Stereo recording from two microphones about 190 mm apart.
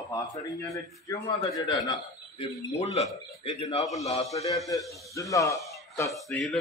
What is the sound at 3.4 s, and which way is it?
Speech, 35° left (ahead or behind).